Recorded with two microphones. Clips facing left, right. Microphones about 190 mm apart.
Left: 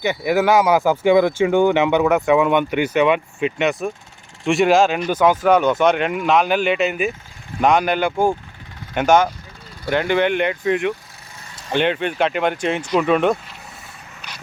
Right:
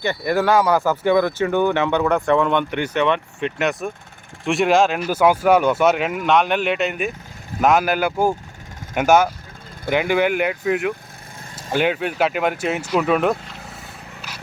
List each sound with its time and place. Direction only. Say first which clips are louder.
0.0 s speech: left 2 dB; 15° left (ahead or behind); by 13.3 s 5° right (ahead or behind)